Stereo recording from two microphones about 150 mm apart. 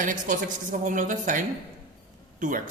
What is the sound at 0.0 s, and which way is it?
A man's voice, 60° right (ahead or behind).